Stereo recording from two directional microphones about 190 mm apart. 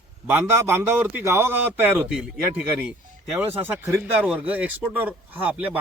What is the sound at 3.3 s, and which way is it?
Speech, 10° right (ahead or behind).